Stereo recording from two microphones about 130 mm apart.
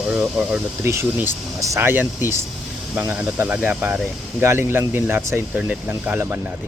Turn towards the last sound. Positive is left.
turn(degrees=-15)  # may be behind; listen again after turning